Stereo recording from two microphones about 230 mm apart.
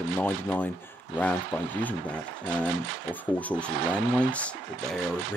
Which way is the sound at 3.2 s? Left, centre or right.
Centre.